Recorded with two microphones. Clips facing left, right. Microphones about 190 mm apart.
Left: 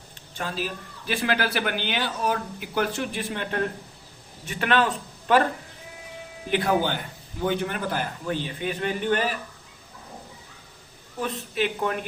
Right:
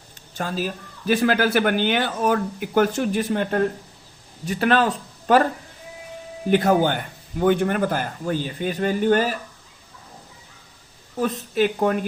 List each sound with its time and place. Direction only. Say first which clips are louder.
0.3 s a man's voice: right 4 dB; 40° right (ahead or behind)
6.5 s a man's voice: right 5 dB; 45° right (ahead or behind)
11.2 s speech: right 6 dB; 40° right (ahead or behind)